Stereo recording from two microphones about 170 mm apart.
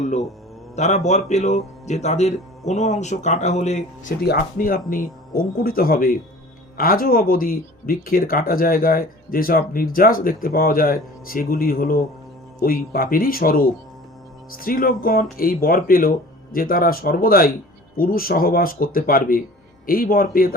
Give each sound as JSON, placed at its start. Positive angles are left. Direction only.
{"t": 0.0, "sound": "a man's voice", "side_deg": 40}
{"t": 4.2, "sound": "speech", "side_deg": 60}